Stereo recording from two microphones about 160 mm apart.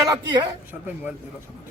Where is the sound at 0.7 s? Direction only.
10° right (ahead or behind).